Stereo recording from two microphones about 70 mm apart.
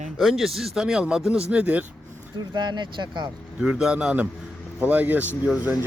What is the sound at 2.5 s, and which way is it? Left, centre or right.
Speech, right.